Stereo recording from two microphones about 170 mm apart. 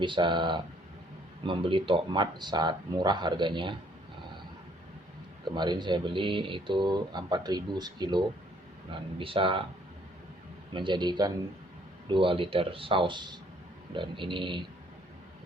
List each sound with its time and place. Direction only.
0.0 s speech: 30° right (ahead or behind)
5.5 s speech: 25° right (ahead or behind)
10.8 s speech: 25° right (ahead or behind)